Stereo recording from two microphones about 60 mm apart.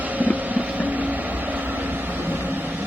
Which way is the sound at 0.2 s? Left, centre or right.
Right.